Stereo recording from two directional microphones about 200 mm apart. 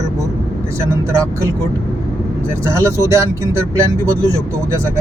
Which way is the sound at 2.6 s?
15° right (ahead or behind).